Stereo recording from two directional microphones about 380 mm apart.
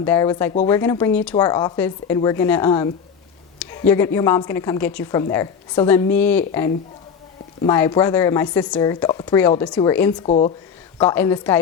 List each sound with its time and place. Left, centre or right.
0.0 s speech: centre
7.6 s speech: centre
10.9 s a woman's voice: centre